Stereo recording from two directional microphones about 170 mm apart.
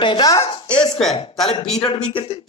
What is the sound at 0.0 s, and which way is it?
Speech, 25° left (ahead or behind).